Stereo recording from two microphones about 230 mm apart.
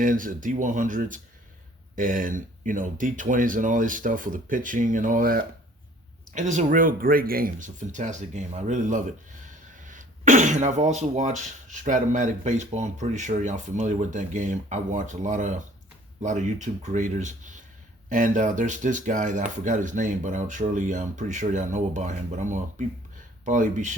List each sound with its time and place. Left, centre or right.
0.0 s speech: right